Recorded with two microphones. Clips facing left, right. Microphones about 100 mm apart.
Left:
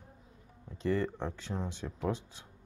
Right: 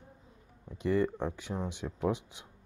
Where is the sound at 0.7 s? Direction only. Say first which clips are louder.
Right 3 dB; 15° right (ahead or behind).